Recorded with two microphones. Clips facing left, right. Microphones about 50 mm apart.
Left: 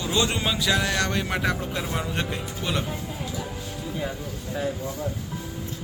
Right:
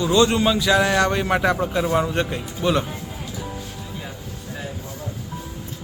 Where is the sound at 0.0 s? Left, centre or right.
Centre.